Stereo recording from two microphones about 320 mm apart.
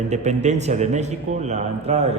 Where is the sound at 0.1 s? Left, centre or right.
Right.